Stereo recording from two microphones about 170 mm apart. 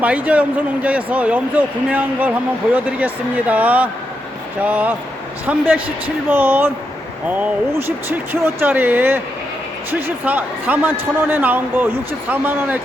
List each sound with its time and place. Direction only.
0.0 s speech: 10° right (ahead or behind)